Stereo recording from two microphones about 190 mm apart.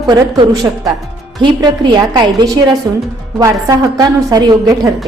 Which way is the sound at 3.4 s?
20° right (ahead or behind).